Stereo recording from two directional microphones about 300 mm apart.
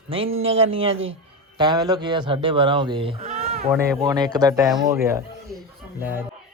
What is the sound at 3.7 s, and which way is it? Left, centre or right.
Speech, centre.